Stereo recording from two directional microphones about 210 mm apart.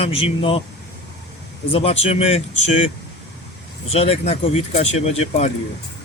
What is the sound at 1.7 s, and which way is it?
Speech, 30° left (ahead or behind).